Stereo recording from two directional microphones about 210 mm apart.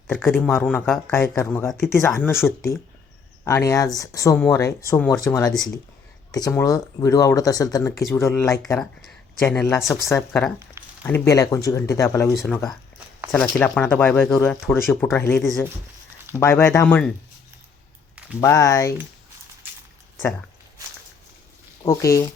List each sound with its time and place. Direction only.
0.1 s speech: 5° left (ahead or behind)
3.4 s speech: 15° left (ahead or behind)
18.3 s speech: 15° left (ahead or behind)
21.8 s speech: 15° left (ahead or behind)